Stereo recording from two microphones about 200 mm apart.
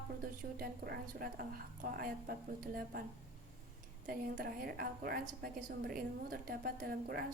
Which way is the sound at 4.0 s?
45° right (ahead or behind).